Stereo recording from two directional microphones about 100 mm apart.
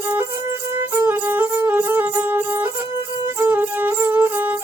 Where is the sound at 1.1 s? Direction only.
20° right (ahead or behind).